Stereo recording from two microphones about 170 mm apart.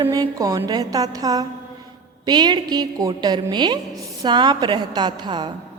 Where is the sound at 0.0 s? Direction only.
20° right (ahead or behind).